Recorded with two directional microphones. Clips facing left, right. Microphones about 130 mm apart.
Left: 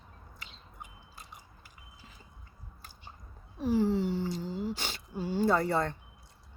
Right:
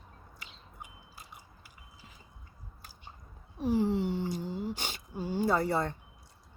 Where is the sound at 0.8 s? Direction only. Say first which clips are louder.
Even; 10° right (ahead or behind).